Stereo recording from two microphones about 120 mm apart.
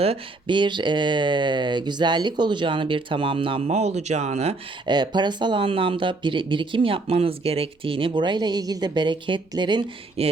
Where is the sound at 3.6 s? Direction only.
65° right (ahead or behind).